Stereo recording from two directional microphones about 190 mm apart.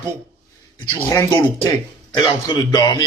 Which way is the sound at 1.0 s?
15° left (ahead or behind).